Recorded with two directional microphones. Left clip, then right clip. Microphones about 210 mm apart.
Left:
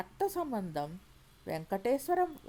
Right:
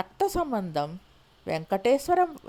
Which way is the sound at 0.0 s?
20° right (ahead or behind).